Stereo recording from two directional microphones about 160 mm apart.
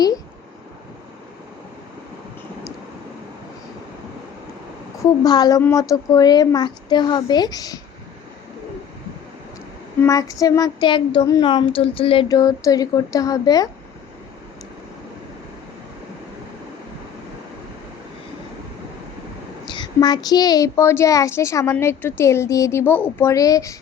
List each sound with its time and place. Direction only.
5.2 s a woman's voice: 25° left (ahead or behind)
10.0 s a woman's voice: 20° left (ahead or behind)
12.3 s a woman's voice: 20° left (ahead or behind)
19.6 s a woman's voice: 30° left (ahead or behind)